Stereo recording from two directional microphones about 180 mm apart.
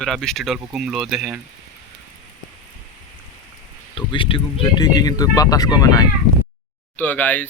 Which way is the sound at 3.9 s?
30° left (ahead or behind).